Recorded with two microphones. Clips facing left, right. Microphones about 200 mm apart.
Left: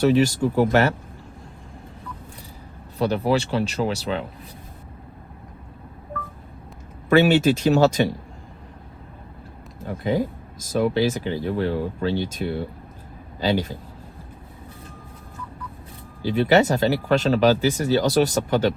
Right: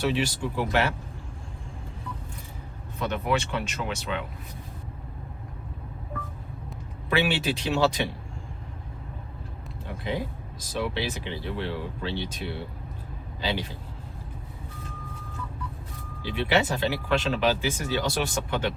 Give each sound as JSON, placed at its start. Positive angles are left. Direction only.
{"t": 0.0, "sound": "speech", "side_deg": 45}
{"t": 3.0, "sound": "speech", "side_deg": 35}
{"t": 7.1, "sound": "speech", "side_deg": 45}
{"t": 9.8, "sound": "speech", "side_deg": 45}
{"t": 16.2, "sound": "speech", "side_deg": 40}